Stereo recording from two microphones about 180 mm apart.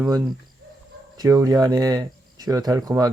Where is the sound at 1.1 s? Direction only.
20° right (ahead or behind).